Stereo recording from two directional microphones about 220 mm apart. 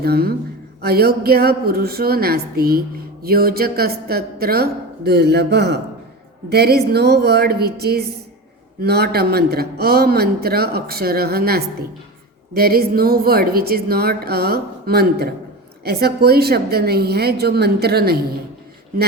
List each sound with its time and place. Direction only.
0.0 s a man's voice: 45° right (ahead or behind)